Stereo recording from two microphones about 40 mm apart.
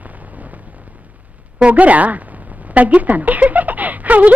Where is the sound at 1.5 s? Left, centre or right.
Right.